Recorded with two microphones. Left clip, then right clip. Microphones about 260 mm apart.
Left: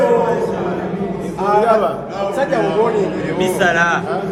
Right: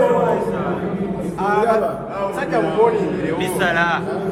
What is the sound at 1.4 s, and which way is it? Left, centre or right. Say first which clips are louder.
Speech: left 3 dB; left.